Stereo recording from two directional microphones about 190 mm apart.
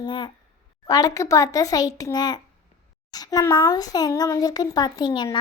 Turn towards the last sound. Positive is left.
turn(degrees=20)  # may be behind; listen again after turning